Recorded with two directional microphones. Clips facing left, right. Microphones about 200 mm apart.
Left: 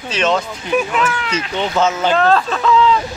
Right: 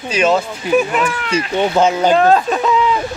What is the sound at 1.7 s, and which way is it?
Speech, 30° right (ahead or behind).